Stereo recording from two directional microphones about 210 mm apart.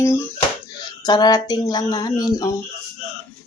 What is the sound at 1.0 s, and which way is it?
Speech, 20° left (ahead or behind).